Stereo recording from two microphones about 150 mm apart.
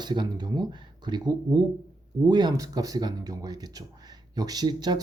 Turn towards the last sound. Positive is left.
turn(degrees=-30)  # may be behind; listen again after turning